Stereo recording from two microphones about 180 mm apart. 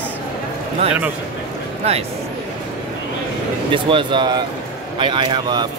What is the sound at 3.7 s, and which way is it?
Speech, 30° right (ahead or behind).